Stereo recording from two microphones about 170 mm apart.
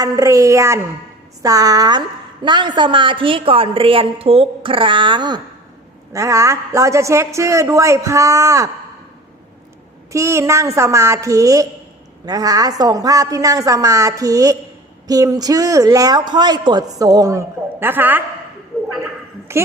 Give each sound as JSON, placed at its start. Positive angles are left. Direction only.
{"t": 0.0, "sound": "a woman's voice", "side_deg": -20}
{"t": 10.1, "sound": "a woman's voice", "side_deg": -15}
{"t": 19.5, "sound": "a woman's voice", "side_deg": -15}